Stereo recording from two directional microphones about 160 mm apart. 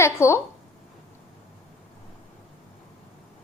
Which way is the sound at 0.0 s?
15° left (ahead or behind).